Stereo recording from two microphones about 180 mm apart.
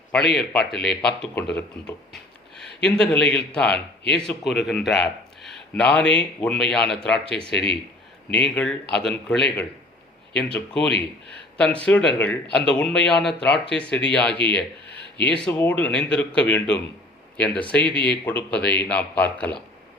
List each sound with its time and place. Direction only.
0.3 s speech: 5° left (ahead or behind)
2.8 s a man's voice: 5° left (ahead or behind)
17.8 s speech: 25° right (ahead or behind)
18.3 s a man's voice: 10° left (ahead or behind)